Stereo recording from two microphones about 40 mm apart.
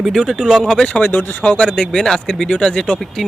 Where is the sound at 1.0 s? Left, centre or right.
Left.